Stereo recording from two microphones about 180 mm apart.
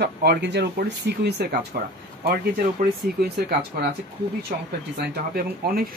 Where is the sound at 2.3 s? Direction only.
55° right (ahead or behind).